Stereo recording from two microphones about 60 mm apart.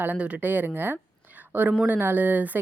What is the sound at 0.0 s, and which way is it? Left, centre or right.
Speech, right.